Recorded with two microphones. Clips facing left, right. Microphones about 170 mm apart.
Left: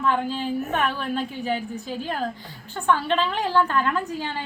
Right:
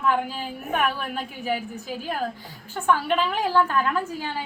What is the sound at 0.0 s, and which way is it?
A woman's voice, 10° right (ahead or behind).